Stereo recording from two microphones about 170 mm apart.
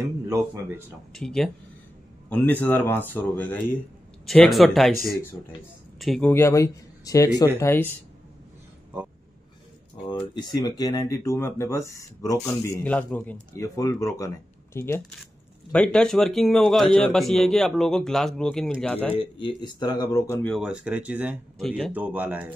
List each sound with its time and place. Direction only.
1.1 s a man's voice: 5° left (ahead or behind)
5.9 s speech: centre (ahead or behind)
6.3 s speech: 15° left (ahead or behind)
10.0 s speech: 30° left (ahead or behind)
12.8 s speech: 10° left (ahead or behind)
13.5 s a man's voice: 20° left (ahead or behind)
19.1 s speech: 30° left (ahead or behind)
20.4 s a man's voice: centre (ahead or behind)
21.9 s speech: 10° right (ahead or behind)